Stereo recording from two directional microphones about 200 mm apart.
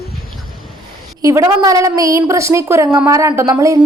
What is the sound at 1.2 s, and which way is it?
A woman's voice, 15° right (ahead or behind).